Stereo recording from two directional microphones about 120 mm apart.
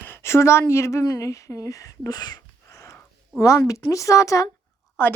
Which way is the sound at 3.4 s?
25° left (ahead or behind).